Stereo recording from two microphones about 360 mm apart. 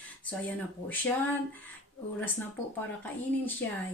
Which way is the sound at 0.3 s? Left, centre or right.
Centre.